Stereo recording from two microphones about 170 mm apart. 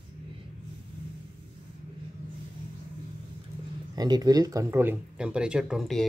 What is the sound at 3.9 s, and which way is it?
Speech, 25° right (ahead or behind).